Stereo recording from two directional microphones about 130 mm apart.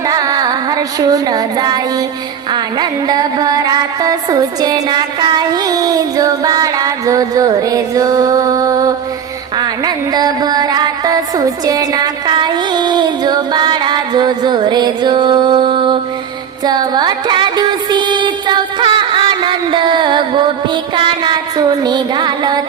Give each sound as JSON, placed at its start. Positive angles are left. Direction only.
{"t": 0.1, "sound": "music", "side_deg": -30}